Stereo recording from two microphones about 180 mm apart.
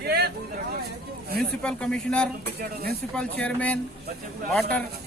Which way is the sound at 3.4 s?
5° left (ahead or behind).